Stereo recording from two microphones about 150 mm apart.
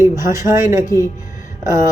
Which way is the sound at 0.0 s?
20° right (ahead or behind).